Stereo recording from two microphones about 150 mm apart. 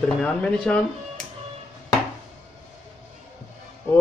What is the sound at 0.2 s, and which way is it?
Speech, 5° left (ahead or behind).